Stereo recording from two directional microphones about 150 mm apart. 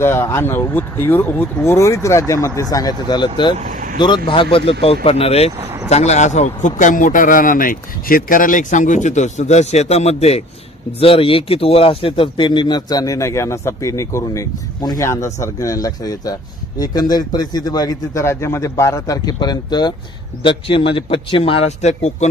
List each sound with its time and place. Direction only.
0.0 s speech: 15° left (ahead or behind)
3.6 s speech: 60° right (ahead or behind)
3.9 s a man's voice: 30° left (ahead or behind); by 22.3 s 50° left (ahead or behind)